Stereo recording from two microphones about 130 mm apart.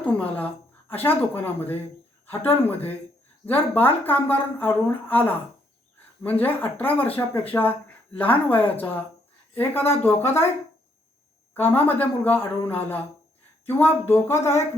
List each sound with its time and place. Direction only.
0.0 s speech: 10° left (ahead or behind)
11.5 s speech: 15° left (ahead or behind)
14.0 s speech: 20° left (ahead or behind)